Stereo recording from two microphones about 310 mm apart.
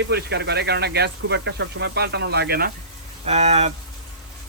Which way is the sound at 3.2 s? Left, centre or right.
Centre.